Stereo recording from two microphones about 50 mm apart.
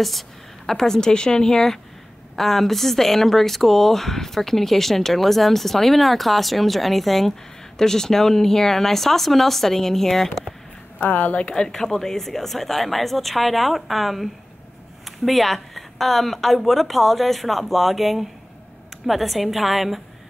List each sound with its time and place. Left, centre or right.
0.7 s speech: centre
11.0 s a woman's voice: left
11.5 s speech: centre